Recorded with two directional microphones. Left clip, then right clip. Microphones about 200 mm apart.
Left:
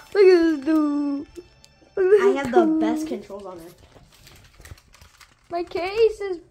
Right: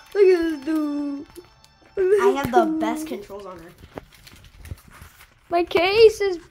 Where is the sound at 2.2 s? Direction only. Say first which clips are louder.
Even; 10° right (ahead or behind).